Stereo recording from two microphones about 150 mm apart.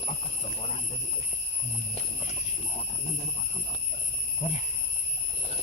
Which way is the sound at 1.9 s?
45° left (ahead or behind).